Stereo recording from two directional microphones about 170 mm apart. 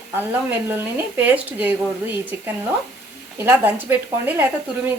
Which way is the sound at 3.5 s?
10° right (ahead or behind).